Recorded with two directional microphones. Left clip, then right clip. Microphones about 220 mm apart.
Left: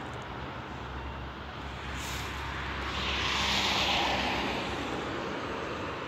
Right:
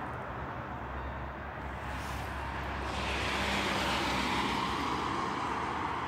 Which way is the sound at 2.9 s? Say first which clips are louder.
Left 3 dB; 40° right (ahead or behind).